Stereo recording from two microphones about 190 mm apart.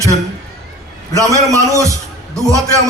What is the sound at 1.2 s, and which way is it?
A man's voice, 15° right (ahead or behind).